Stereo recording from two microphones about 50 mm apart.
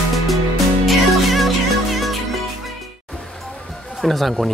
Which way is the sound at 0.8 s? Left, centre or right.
Centre.